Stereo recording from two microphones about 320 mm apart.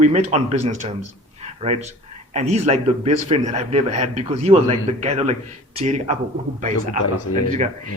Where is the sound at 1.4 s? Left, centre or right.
Centre.